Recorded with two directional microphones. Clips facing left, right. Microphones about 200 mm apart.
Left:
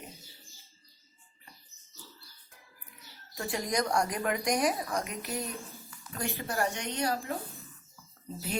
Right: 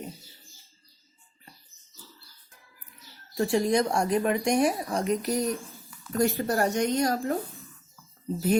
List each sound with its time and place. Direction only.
3.3 s a woman's voice: 30° right (ahead or behind); by 7.3 s 45° right (ahead or behind)